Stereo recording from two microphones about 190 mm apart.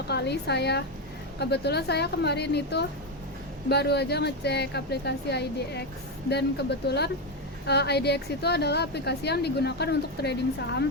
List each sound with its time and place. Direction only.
0.1 s a woman's voice: 60° left (ahead or behind)